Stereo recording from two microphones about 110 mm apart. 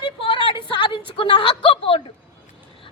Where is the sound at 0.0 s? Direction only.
50° left (ahead or behind).